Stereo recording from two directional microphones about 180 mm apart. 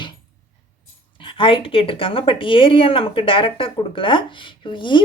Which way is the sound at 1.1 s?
30° left (ahead or behind).